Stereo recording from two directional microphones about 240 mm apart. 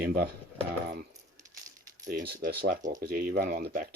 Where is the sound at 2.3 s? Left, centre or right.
Right.